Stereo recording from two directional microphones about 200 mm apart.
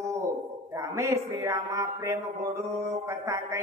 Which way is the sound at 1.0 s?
15° right (ahead or behind).